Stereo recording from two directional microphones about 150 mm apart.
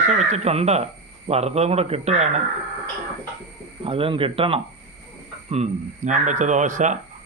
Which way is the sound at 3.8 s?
35° right (ahead or behind).